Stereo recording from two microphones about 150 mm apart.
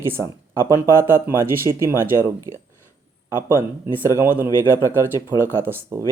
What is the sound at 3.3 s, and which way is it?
Speech, 15° right (ahead or behind).